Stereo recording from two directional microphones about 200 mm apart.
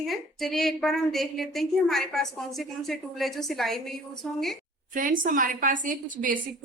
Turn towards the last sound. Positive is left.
turn(degrees=-40)  # may be behind; listen again after turning